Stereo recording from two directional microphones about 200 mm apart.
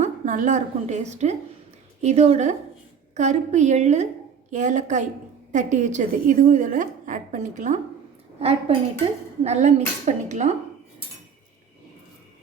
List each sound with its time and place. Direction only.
0.0 s a woman's voice: 35° right (ahead or behind)